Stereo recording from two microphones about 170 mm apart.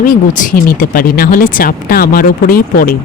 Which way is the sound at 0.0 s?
55° left (ahead or behind).